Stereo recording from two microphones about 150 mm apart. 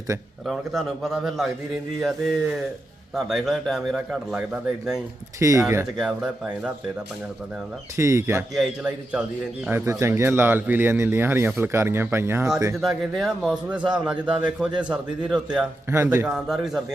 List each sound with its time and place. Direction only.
0.1 s speech: 20° right (ahead or behind)
0.4 s a man's voice: centre (ahead or behind)
5.4 s speech: 20° right (ahead or behind)
5.8 s a man's voice: 5° right (ahead or behind)
7.9 s speech: 20° right (ahead or behind)
8.5 s a man's voice: 5° right (ahead or behind)
9.6 s speech: 15° right (ahead or behind)
12.7 s a man's voice: centre (ahead or behind)
15.9 s speech: 15° right (ahead or behind)
16.2 s a man's voice: centre (ahead or behind)